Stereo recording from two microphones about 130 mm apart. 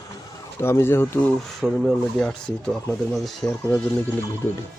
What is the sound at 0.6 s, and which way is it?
Speech, 20° left (ahead or behind).